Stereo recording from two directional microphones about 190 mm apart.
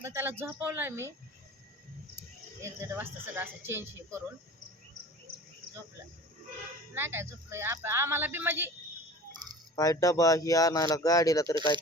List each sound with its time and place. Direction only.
0.0 s speech: 15° right (ahead or behind)
2.6 s speech: 10° right (ahead or behind)
6.9 s speech: 10° right (ahead or behind)
9.7 s speech: 20° left (ahead or behind)